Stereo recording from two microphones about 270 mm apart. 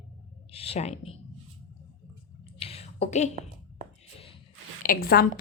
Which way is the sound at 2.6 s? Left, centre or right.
Left.